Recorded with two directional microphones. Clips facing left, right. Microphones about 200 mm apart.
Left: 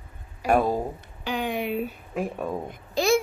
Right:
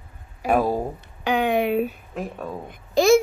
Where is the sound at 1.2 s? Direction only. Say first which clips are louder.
Right 7 dB; 65° right (ahead or behind).